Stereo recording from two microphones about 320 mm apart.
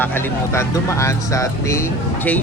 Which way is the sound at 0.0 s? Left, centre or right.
Centre.